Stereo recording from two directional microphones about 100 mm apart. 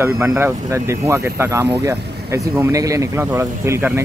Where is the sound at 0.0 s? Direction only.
25° right (ahead or behind).